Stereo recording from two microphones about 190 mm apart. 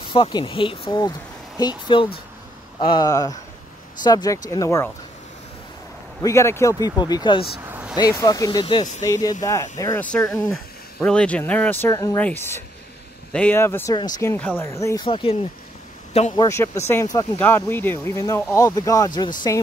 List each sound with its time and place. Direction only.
0.1 s speech: 25° left (ahead or behind)
6.2 s speech: 15° left (ahead or behind)
7.6 s vehicle: 10° right (ahead or behind)
8.2 s speech: 20° left (ahead or behind)
10.0 s speech: 5° left (ahead or behind)
15.0 s a man's voice: 30° left (ahead or behind)
16.3 s speech: 15° left (ahead or behind)